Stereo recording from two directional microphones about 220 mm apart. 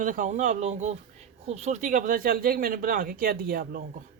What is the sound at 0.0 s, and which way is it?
Speech, 35° right (ahead or behind).